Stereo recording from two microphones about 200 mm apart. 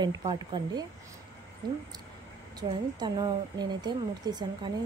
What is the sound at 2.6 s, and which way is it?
Speech, 20° right (ahead or behind).